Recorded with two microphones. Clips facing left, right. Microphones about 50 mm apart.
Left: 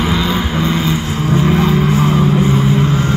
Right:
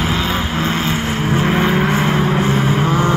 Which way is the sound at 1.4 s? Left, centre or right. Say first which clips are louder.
Left 2 dB; right.